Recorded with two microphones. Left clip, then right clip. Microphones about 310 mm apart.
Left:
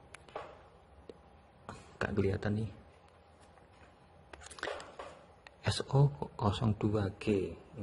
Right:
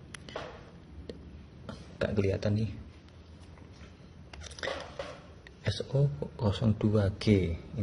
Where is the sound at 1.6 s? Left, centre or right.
Centre.